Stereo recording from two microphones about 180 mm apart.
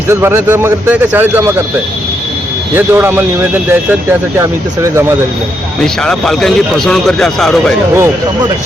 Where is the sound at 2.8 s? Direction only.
10° right (ahead or behind).